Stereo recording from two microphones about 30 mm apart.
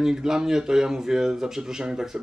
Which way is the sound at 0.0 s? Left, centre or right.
Centre.